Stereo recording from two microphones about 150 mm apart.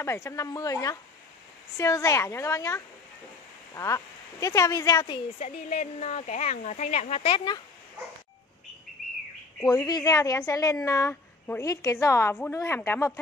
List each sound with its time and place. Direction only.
0.0 s speech: 20° left (ahead or behind)
5.4 s speech: 50° left (ahead or behind); by 7.6 s 30° left (ahead or behind)
9.7 s a woman's voice: 25° left (ahead or behind)